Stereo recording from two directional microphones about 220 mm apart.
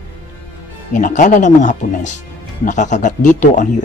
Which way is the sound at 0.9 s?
35° left (ahead or behind).